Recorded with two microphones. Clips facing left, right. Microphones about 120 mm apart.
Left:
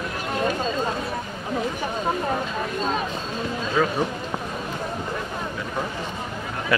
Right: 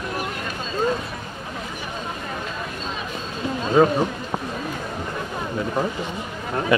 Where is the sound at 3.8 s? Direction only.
45° right (ahead or behind).